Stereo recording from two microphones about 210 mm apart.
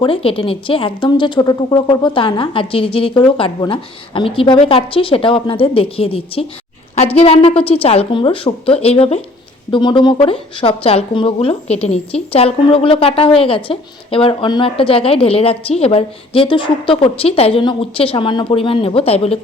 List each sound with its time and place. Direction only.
0.0 s a woman's voice: 25° left (ahead or behind)